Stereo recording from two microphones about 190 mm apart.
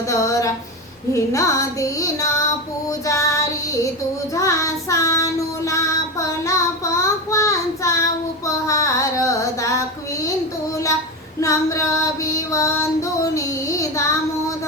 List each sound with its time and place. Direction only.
0.1 s a sound: 15° left (ahead or behind)
1.1 s child singing: 15° left (ahead or behind)
11.3 s female singing: 15° left (ahead or behind)